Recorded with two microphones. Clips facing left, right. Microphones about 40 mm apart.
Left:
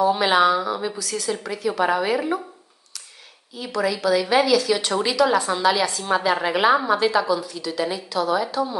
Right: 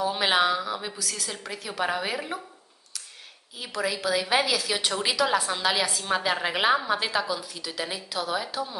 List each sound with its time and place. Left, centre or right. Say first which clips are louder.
0.0 s a woman's voice: left 6 dB; centre
3.5 s a woman's voice: left 6 dB; centre